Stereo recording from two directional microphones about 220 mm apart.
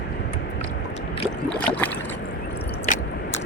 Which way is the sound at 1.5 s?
5° left (ahead or behind).